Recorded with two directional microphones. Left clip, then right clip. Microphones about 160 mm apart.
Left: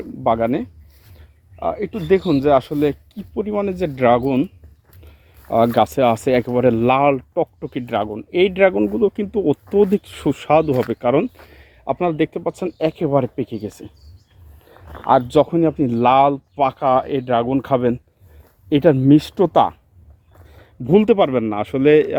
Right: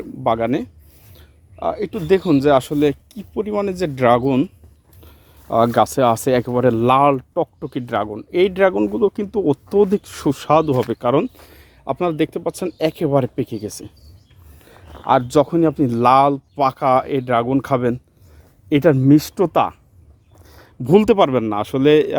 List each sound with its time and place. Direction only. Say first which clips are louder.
0.2 s speech: left 1 dB; 30° right (ahead or behind)
1.1 s a sound: right 4 dB; 30° right (ahead or behind)
2.0 s speech: right 1 dB; 35° right (ahead or behind)
13.7 s speech: right 1 dB; 20° right (ahead or behind)
14.7 s a sound: even; 25° right (ahead or behind)
15.0 s speech: left 1 dB; 20° right (ahead or behind)
15.5 s speech: right 1 dB; 35° right (ahead or behind); by 19.7 s 15° right (ahead or behind)
20.5 s speech: right 1 dB; 35° right (ahead or behind)